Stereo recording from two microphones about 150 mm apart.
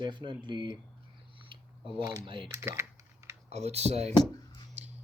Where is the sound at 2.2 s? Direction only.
35° right (ahead or behind).